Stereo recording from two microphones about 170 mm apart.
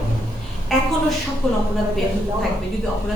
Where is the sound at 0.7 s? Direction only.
Centre (ahead or behind).